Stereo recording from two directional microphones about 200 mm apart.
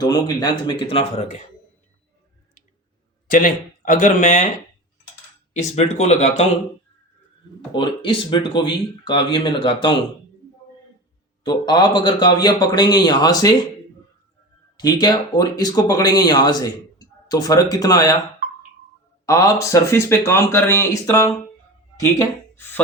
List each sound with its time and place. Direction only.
0.0 s speech: 20° left (ahead or behind)
3.3 s speech: 40° left (ahead or behind)
5.5 s speech: 35° left (ahead or behind)
7.7 s speech: 25° left (ahead or behind)
11.4 s speech: 20° left (ahead or behind)
14.8 s speech: 20° left (ahead or behind)
19.2 s speech: 15° left (ahead or behind)